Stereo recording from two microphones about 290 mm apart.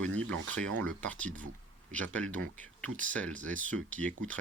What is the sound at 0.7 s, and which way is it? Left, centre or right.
Speech, right.